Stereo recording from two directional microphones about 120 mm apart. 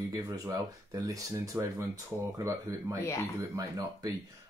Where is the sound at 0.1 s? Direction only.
30° right (ahead or behind).